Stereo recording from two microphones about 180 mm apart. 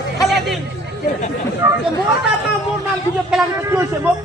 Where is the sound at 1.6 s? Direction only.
15° right (ahead or behind).